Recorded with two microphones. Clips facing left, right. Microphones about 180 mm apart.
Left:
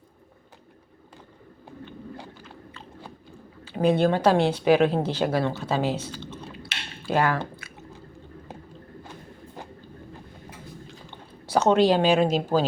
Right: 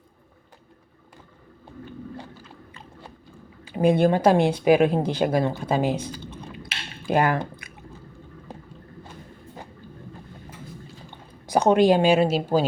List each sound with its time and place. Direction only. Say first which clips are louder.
3.6 s speech: right 2 dB; 10° right (ahead or behind)
11.4 s speech: right 2 dB; 15° right (ahead or behind)